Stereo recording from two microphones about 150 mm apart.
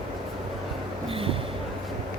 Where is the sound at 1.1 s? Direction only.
40° right (ahead or behind).